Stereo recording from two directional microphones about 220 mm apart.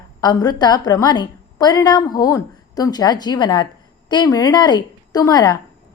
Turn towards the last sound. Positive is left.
turn(degrees=15)  # may be behind; listen again after turning